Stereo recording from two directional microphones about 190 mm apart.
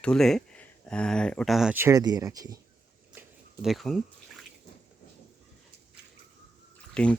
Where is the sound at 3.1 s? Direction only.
5° right (ahead or behind).